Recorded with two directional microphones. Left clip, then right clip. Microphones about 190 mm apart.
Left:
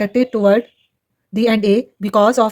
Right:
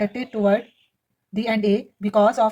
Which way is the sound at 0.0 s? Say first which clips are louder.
Left 7 dB; 55° left (ahead or behind).